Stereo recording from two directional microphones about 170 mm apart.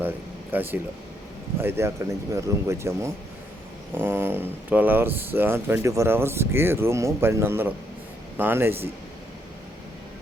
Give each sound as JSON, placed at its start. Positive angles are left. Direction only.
{"t": 0.5, "sound": "speech", "side_deg": -10}